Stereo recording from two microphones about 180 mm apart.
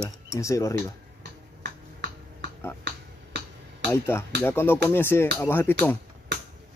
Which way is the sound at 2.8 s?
70° right (ahead or behind).